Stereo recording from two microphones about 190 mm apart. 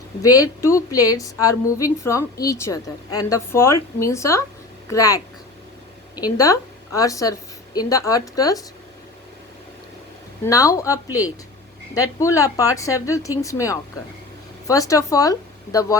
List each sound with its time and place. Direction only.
0.3 s a woman's voice: 20° left (ahead or behind)
10.4 s a woman's voice: 15° left (ahead or behind)
12.2 s a woman's voice: 15° left (ahead or behind)